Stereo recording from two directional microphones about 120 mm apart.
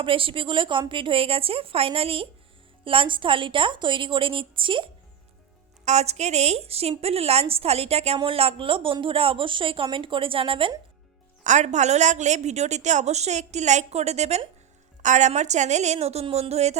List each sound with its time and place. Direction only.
0.0 s a woman's voice: 45° right (ahead or behind)
5.8 s a woman's voice: 70° right (ahead or behind); by 10.7 s 45° right (ahead or behind)
11.4 s a woman's voice: 80° right; by 14.4 s 65° right (ahead or behind)
15.0 s a woman's voice: 85° right; by 16.7 s 65° right (ahead or behind)